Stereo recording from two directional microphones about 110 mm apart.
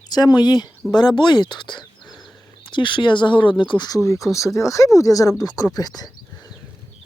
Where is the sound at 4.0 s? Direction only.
30° left (ahead or behind).